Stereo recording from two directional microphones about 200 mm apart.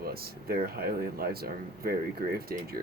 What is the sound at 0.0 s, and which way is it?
Speech, 50° right (ahead or behind).